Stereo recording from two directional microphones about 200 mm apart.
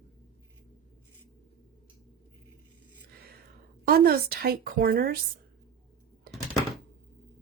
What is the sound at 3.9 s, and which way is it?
A woman's voice, 50° right (ahead or behind).